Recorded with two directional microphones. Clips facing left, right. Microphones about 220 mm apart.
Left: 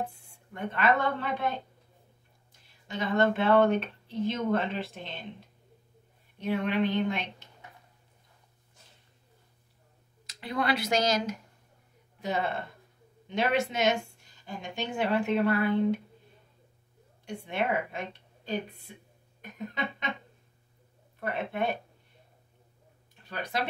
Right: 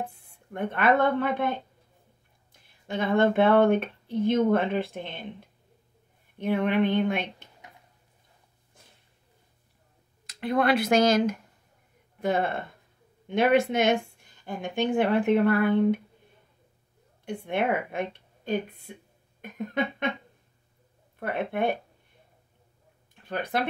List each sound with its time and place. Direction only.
0.5 s speech: 55° right (ahead or behind)
2.9 s speech: 55° right (ahead or behind)
6.4 s speech: 55° right (ahead or behind)
10.2 s speech: 55° right (ahead or behind)
17.2 s a woman's voice: 55° right (ahead or behind)
21.2 s speech: 55° right (ahead or behind)
23.2 s speech: 55° right (ahead or behind)